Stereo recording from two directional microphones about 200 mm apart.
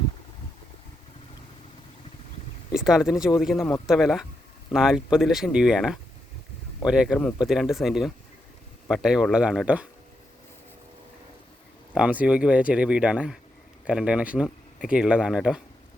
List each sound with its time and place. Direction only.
2.7 s speech: centre (ahead or behind)
11.9 s speech: 5° right (ahead or behind)